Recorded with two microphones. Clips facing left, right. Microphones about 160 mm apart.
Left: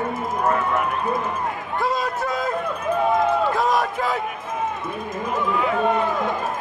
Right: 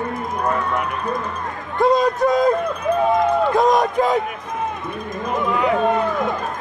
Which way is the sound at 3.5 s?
20° right (ahead or behind).